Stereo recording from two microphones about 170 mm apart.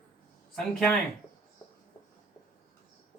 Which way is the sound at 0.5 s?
Centre (ahead or behind).